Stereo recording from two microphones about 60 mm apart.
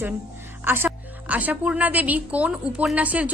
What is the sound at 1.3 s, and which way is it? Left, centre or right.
A woman's voice, right.